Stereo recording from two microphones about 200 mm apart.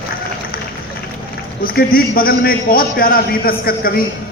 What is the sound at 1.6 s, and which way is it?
A man's voice, 45° left (ahead or behind).